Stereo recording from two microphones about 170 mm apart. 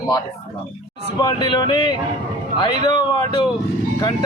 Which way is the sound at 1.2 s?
25° left (ahead or behind).